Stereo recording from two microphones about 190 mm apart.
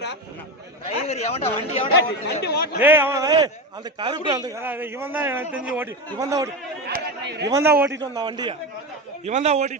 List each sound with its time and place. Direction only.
0.9 s a man's voice: 35° left (ahead or behind)
2.2 s speech: 60° left (ahead or behind)
2.8 s a man's voice: 10° right (ahead or behind)
6.8 s chatter: 60° right (ahead or behind)
7.4 s a man's voice: 15° right (ahead or behind)
8.1 s a man's voice: 25° right (ahead or behind)
9.2 s a man's voice: 35° right (ahead or behind)